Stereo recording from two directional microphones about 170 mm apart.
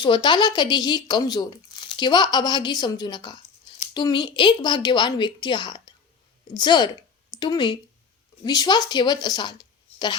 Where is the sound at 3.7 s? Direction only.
40° left (ahead or behind).